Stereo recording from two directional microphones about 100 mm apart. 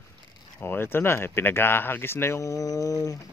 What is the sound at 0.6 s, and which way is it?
Speech, 25° left (ahead or behind).